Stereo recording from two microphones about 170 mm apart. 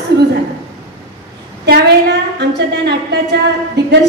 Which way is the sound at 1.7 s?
80° right.